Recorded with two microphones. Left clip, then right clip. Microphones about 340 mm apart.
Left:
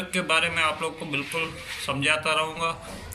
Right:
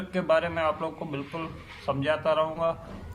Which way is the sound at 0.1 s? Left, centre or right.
Right.